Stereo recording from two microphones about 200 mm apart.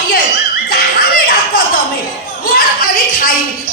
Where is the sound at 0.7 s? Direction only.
50° left (ahead or behind).